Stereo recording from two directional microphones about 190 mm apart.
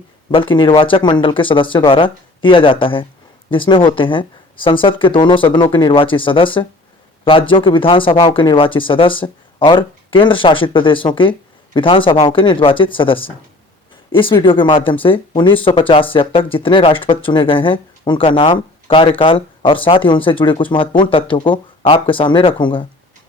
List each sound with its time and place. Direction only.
0.3 s speech: 25° left (ahead or behind)